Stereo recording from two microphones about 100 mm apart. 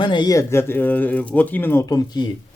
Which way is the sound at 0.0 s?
50° left (ahead or behind).